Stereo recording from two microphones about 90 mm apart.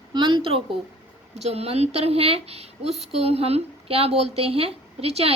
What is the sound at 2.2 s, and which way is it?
A woman's voice, 90° right.